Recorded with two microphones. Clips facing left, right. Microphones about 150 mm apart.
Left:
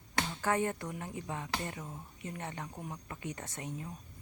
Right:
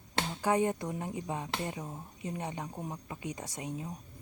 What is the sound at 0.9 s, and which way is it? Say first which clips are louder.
Speech: right 4 dB; 20° right (ahead or behind).